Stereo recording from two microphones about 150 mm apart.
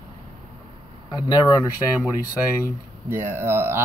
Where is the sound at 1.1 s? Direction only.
25° left (ahead or behind).